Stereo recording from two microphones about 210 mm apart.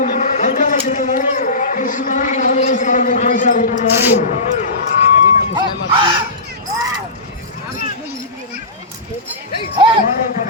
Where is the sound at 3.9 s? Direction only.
10° right (ahead or behind).